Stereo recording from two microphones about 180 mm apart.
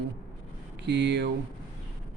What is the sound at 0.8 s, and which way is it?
Speech, 75° right (ahead or behind).